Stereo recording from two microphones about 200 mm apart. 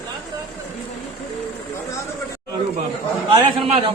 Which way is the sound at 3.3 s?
30° right (ahead or behind).